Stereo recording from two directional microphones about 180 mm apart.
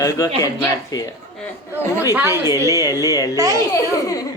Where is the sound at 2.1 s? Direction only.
15° right (ahead or behind).